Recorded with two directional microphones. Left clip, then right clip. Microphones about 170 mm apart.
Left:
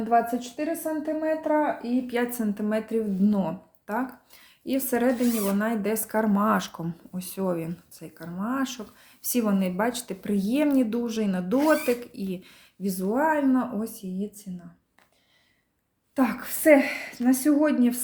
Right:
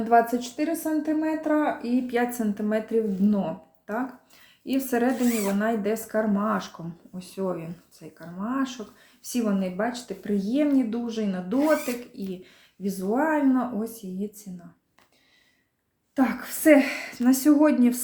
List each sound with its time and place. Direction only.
0.1 s a woman's voice: 5° left (ahead or behind)
2.1 s speech: 20° left (ahead or behind)
16.1 s speech: 20° left (ahead or behind)
16.6 s a woman's voice: 10° left (ahead or behind)